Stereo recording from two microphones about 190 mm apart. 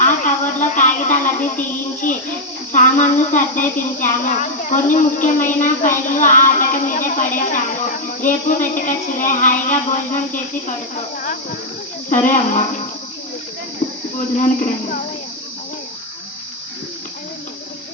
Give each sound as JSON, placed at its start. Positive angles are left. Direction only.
{"t": 0.0, "sound": "a sound", "side_deg": 40}
{"t": 2.7, "sound": "a woman's voice", "side_deg": 40}
{"t": 12.0, "sound": "a woman's voice", "side_deg": 40}
{"t": 14.3, "sound": "a woman's voice", "side_deg": 40}